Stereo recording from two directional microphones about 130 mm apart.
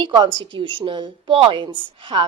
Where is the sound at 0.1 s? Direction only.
40° right (ahead or behind).